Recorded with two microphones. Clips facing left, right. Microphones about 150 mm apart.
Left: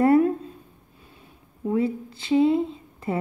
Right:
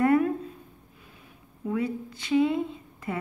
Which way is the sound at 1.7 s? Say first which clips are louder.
Left 5 dB; 30° left (ahead or behind).